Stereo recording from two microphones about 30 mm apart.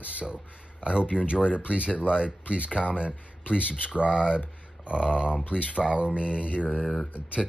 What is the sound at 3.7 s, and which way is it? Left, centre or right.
Speech, right.